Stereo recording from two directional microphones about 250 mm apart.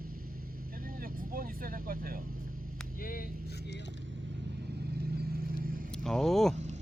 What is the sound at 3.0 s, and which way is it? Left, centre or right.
Speech, left.